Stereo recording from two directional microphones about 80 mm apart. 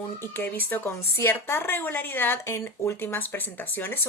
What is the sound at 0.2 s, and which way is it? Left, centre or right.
Speech, left.